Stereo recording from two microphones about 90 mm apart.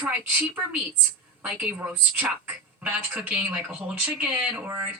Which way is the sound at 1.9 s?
20° right (ahead or behind).